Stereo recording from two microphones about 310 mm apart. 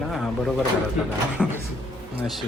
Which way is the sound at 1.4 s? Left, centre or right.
Centre.